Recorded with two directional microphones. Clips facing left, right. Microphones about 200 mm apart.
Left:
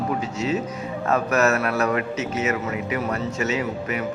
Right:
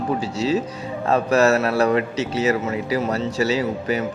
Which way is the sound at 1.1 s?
30° right (ahead or behind).